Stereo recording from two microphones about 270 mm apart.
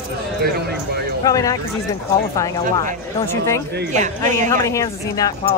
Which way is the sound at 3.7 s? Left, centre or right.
Right.